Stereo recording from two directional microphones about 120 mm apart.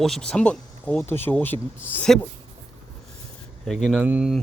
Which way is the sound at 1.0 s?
20° left (ahead or behind).